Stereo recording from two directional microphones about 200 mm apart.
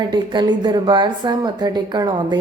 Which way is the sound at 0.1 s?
20° right (ahead or behind).